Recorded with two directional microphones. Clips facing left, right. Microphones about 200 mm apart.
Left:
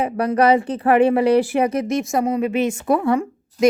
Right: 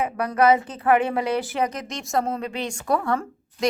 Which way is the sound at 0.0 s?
30° left (ahead or behind).